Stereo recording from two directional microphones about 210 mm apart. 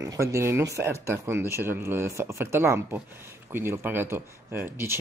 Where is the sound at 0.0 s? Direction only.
15° right (ahead or behind).